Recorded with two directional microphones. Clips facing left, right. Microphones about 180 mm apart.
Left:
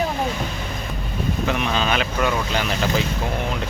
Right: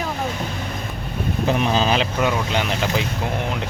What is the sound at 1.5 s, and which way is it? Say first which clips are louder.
Speech: right 4 dB; 35° right (ahead or behind).